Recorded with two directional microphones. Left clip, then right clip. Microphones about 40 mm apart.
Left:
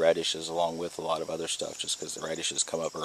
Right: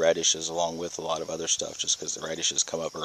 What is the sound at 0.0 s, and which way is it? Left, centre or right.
Speech, right.